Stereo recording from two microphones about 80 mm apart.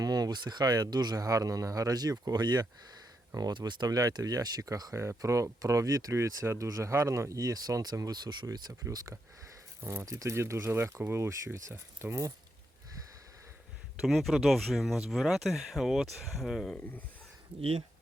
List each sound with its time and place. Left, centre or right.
0.0 s speech: right
8.4 s speech: right
9.8 s speech: right
14.0 s speech: centre